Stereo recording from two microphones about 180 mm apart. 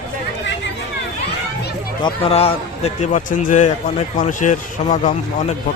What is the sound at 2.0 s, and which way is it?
A man's voice, 30° left (ahead or behind).